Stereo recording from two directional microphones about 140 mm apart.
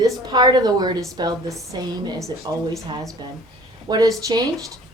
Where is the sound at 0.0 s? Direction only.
30° right (ahead or behind).